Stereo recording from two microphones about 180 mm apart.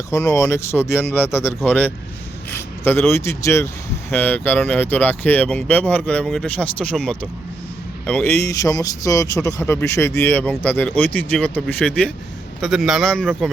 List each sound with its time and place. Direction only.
0.1 s speech: 15° left (ahead or behind)